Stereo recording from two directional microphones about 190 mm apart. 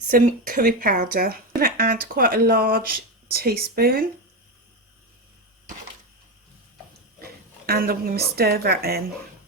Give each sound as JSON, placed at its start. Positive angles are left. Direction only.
{"t": 0.1, "sound": "speech", "side_deg": -45}
{"t": 7.2, "sound": "a woman's voice", "side_deg": -55}